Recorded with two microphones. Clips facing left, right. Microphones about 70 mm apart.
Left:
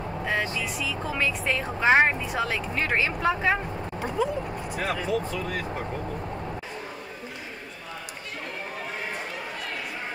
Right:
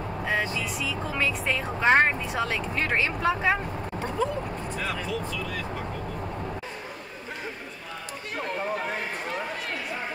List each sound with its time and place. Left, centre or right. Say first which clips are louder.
0.2 s speech: even; centre
5.0 s speech: left 3 dB; left